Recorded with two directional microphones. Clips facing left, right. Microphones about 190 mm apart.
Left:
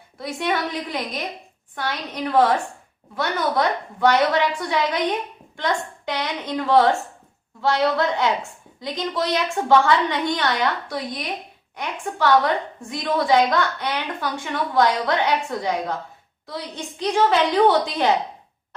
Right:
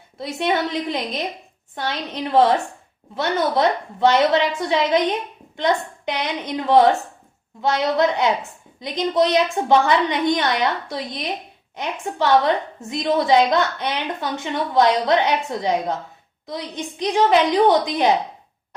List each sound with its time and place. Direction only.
0.2 s a woman's voice: 25° right (ahead or behind)